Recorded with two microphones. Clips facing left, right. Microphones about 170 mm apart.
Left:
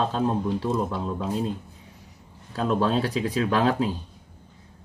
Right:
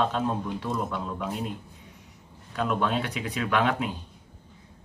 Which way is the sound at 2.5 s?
35° left (ahead or behind).